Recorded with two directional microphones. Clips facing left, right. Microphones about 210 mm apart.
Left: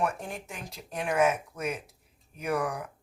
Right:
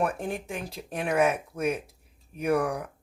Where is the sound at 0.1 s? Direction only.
55° right (ahead or behind).